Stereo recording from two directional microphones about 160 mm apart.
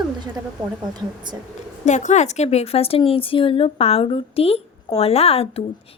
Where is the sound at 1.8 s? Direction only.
50° left (ahead or behind).